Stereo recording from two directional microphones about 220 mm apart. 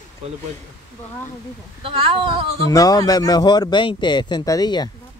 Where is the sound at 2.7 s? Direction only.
15° left (ahead or behind).